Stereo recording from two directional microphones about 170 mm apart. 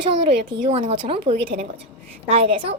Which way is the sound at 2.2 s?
35° right (ahead or behind).